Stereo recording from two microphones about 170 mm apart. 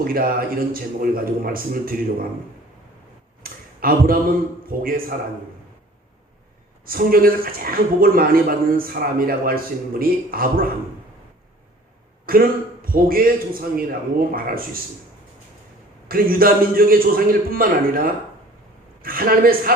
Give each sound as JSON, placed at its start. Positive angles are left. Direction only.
{"t": 0.0, "sound": "a man's voice", "side_deg": -60}
{"t": 3.8, "sound": "a man's voice", "side_deg": -60}
{"t": 6.8, "sound": "a man's voice", "side_deg": -60}
{"t": 12.2, "sound": "a man's voice", "side_deg": -60}
{"t": 16.0, "sound": "a man's voice", "side_deg": -60}